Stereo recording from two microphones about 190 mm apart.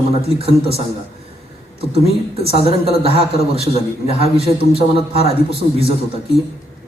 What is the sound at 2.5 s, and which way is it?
A man's voice, 30° right (ahead or behind).